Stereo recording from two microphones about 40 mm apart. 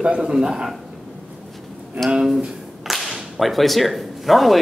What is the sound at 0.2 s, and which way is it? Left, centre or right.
Speech, centre.